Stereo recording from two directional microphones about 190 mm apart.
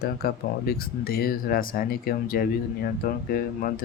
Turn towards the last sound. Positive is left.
turn(degrees=50)  # may be behind; listen again after turning